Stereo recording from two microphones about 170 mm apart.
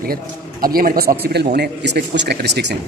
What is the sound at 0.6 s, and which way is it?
Speech, 55° right (ahead or behind).